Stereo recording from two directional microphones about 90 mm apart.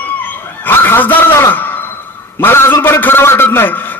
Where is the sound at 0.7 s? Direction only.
20° left (ahead or behind).